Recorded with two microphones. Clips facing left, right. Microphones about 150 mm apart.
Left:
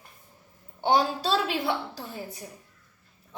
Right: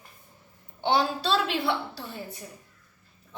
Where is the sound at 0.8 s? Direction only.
45° left (ahead or behind).